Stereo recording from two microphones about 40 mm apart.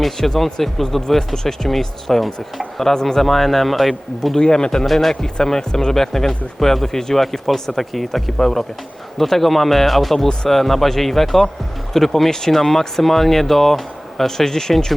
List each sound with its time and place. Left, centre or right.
0.0 s speech: centre
4.4 s speech: centre